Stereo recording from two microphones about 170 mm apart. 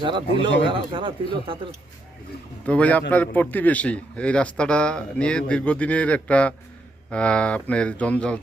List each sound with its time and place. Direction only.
0.0 s speech: 30° right (ahead or behind)
2.6 s a man's voice: 10° left (ahead or behind)